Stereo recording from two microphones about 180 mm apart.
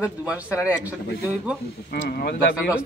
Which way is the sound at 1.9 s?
60° left (ahead or behind).